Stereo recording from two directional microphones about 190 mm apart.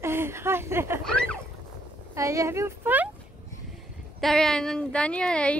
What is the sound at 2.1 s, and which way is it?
Speech, 15° right (ahead or behind).